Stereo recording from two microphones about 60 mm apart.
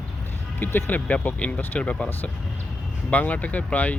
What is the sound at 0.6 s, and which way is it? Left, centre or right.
Speech, left.